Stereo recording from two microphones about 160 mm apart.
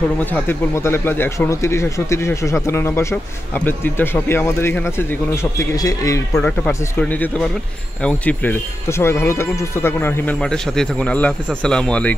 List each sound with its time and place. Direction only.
0.2 s speech: 10° left (ahead or behind)
6.3 s speech: 5° left (ahead or behind)